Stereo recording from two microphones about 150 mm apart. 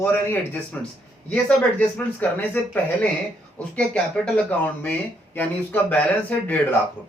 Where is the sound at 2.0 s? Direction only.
15° left (ahead or behind).